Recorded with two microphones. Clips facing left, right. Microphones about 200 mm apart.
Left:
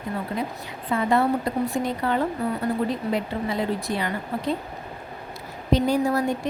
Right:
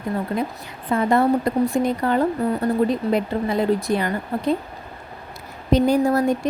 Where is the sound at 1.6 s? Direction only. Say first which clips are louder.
Right 5 dB; 45° right (ahead or behind).